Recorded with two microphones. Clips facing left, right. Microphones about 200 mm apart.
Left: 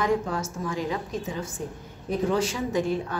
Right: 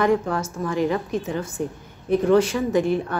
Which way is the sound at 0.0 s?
60° right (ahead or behind).